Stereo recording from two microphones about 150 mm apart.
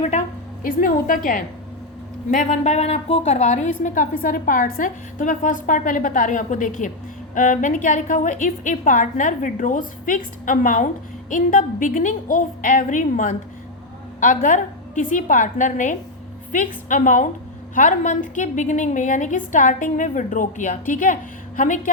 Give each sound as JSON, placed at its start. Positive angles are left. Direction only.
{"t": 0.0, "sound": "a woman's voice", "side_deg": 50}